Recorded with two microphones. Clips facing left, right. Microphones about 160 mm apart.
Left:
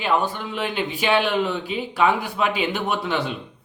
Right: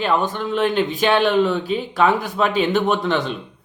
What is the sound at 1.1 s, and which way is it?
Speech, 45° right (ahead or behind).